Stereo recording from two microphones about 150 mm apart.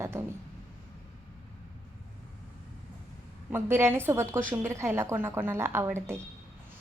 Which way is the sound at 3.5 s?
15° right (ahead or behind).